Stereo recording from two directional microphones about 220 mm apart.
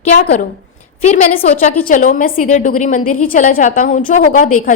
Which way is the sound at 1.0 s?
35° left (ahead or behind).